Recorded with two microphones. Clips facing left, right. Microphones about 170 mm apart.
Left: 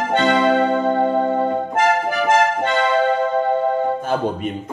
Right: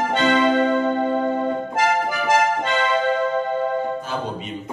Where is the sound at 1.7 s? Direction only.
55° left (ahead or behind).